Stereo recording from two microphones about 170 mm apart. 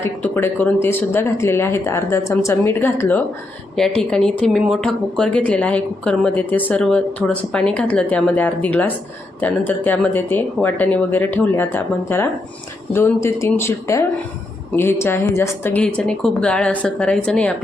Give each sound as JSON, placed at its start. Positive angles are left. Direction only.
{"t": 0.0, "sound": "speech", "side_deg": 15}